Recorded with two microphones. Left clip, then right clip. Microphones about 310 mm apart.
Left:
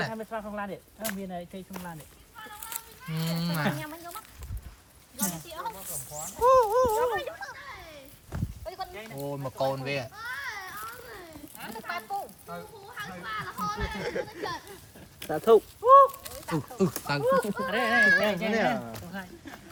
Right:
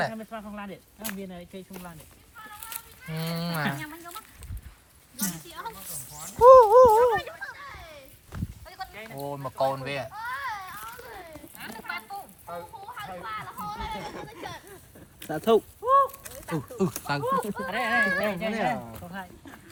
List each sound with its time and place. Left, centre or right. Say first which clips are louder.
0.1 s speech: left 3 dB; left
2.6 s cattle: even; centre
5.2 s speech: left 1 dB; centre
5.7 s a sound: left 3 dB; centre
7.0 s a sound: right 5 dB; centre
8.3 s sheep: left 5 dB; centre
9.0 s speech: right 1 dB; centre
11.6 s a sound: even; centre
12.5 s speech: right 3 dB; centre
15.3 s speech: left 2 dB; right
15.8 s a sound: left 5 dB; centre
16.5 s speech: left 1 dB; centre
17.5 s speech: left 1 dB; centre